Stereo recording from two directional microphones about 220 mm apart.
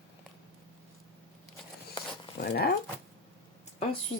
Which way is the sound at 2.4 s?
45° left (ahead or behind).